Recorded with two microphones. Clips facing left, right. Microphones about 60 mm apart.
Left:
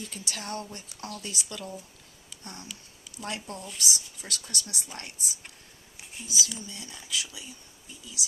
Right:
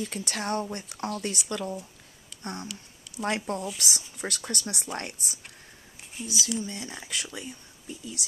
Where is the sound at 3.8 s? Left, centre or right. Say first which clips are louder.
Right 2 dB; right.